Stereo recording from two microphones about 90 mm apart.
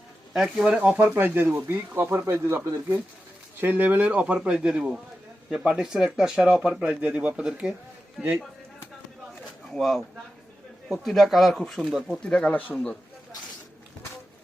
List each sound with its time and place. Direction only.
0.3 s speech: 10° right (ahead or behind); by 3.0 s 30° right (ahead or behind)
3.6 s a man's voice: 20° right (ahead or behind)
9.7 s speech: centre (ahead or behind)
12.2 s speech: 10° left (ahead or behind)